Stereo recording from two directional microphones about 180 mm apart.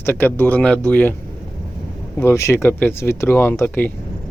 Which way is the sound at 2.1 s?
15° left (ahead or behind).